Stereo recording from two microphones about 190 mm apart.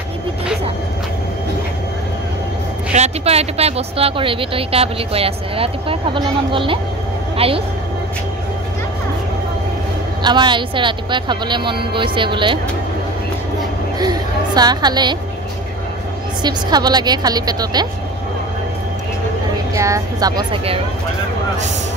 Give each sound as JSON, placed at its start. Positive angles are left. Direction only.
{"t": 2.9, "sound": "speech", "side_deg": -35}
{"t": 10.2, "sound": "speech", "side_deg": -25}
{"t": 13.9, "sound": "a woman's voice", "side_deg": -20}
{"t": 16.4, "sound": "speech", "side_deg": -20}
{"t": 19.7, "sound": "speech", "side_deg": -15}